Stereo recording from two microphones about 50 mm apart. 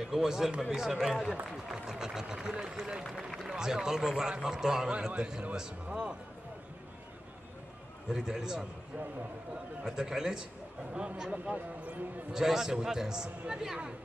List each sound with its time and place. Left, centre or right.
0.1 s a man's voice: centre
3.0 s a man's voice: centre
8.1 s a man's voice: centre
9.8 s a man's voice: centre
10.9 s a man's voice: right
12.3 s a man's voice: centre